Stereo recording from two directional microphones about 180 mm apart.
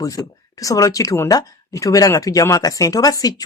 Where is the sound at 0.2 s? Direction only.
15° left (ahead or behind).